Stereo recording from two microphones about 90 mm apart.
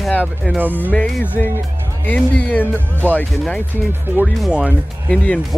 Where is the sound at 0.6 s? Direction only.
20° right (ahead or behind).